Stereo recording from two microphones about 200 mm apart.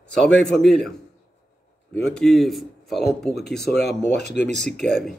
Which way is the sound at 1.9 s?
5° left (ahead or behind).